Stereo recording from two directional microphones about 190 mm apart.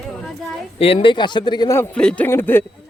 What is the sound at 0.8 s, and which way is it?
Speech, 30° left (ahead or behind).